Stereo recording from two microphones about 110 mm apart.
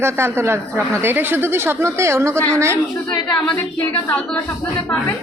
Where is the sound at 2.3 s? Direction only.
10° left (ahead or behind).